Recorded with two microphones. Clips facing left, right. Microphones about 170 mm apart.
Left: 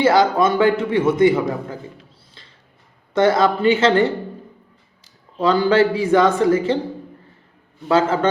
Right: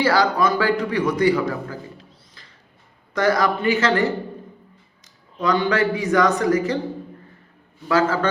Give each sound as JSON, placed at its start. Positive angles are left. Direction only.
{"t": 0.0, "sound": "a man's voice", "side_deg": 25}
{"t": 3.2, "sound": "a man's voice", "side_deg": 25}
{"t": 7.9, "sound": "a man's voice", "side_deg": 25}